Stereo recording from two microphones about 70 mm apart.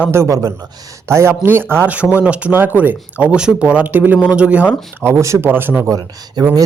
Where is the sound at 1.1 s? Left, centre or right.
Right.